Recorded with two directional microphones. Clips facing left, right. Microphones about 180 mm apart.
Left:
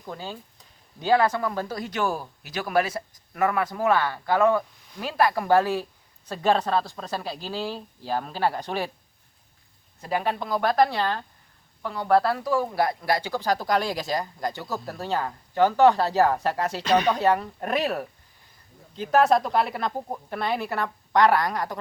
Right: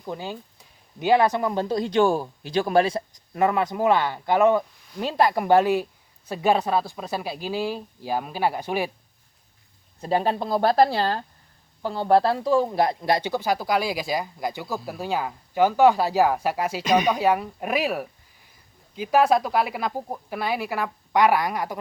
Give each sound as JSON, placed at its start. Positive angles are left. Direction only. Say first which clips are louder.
{"t": 0.0, "sound": "speech", "louder": "right 4 dB", "side_deg": -15}
{"t": 10.0, "sound": "speech", "louder": "right 4 dB", "side_deg": -30}
{"t": 13.4, "sound": "speech", "louder": "right 1 dB", "side_deg": -5}